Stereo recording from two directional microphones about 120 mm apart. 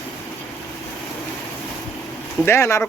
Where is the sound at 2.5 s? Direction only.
25° left (ahead or behind).